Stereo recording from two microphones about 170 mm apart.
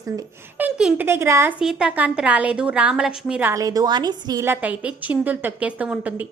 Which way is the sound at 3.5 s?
20° right (ahead or behind).